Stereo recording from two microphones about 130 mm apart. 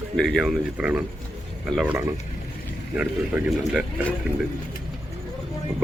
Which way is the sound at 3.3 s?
10° right (ahead or behind).